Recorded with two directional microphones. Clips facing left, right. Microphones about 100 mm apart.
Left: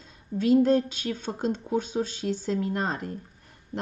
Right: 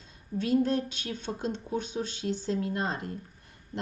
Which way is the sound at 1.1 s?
45° left (ahead or behind).